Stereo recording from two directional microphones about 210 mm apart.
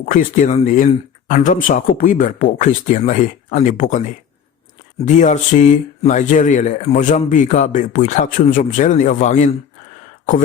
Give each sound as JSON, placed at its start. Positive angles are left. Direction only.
{"t": 0.1, "sound": "speech", "side_deg": 40}
{"t": 5.0, "sound": "speech", "side_deg": 35}